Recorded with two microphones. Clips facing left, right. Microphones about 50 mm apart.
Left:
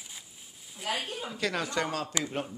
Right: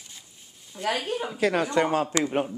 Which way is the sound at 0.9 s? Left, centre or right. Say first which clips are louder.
Right 6 dB; right.